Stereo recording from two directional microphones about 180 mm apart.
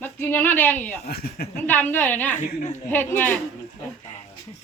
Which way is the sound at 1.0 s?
60° left (ahead or behind).